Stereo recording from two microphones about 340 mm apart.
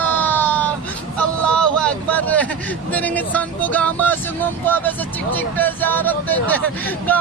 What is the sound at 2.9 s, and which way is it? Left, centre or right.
Speech, centre.